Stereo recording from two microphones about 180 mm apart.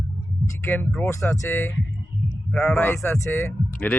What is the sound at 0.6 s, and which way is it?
Speech, 10° left (ahead or behind).